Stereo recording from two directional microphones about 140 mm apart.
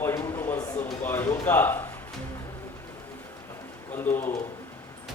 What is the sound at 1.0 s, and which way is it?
Speech, 15° left (ahead or behind).